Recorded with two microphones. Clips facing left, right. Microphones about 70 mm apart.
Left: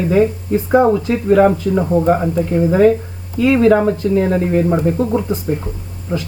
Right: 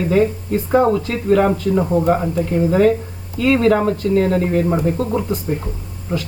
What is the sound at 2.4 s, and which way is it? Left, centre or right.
Speech, centre.